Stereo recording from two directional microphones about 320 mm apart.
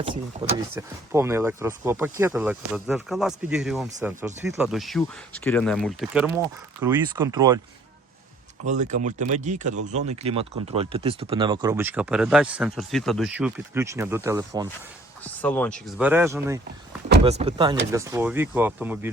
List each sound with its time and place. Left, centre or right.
0.0 s speech: centre
8.6 s speech: right
15.2 s speech: centre
17.2 s speech: centre